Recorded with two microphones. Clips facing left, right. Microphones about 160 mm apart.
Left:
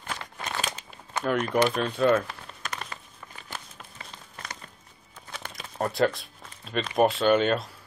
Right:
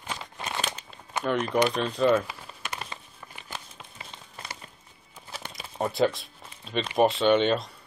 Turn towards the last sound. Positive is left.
turn(degrees=0)  # may be behind; listen again after turning